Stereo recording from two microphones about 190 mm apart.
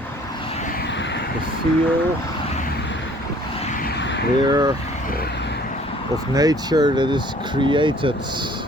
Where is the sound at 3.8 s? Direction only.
60° left (ahead or behind).